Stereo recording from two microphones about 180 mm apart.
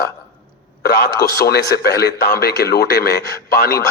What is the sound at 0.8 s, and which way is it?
A man's voice, 60° left (ahead or behind).